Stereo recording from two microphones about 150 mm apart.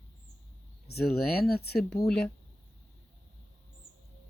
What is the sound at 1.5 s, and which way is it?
Speech, 90° left.